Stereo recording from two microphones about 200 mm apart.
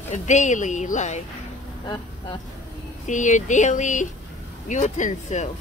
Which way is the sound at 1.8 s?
20° left (ahead or behind).